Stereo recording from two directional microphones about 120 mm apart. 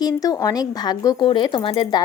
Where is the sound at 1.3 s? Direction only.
45° left (ahead or behind).